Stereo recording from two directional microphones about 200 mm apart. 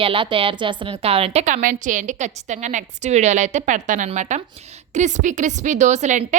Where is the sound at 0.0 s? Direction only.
25° right (ahead or behind).